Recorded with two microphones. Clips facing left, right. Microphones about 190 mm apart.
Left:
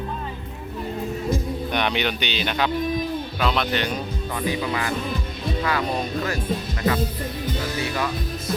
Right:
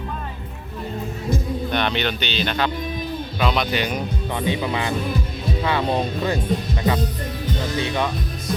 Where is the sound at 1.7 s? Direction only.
15° left (ahead or behind).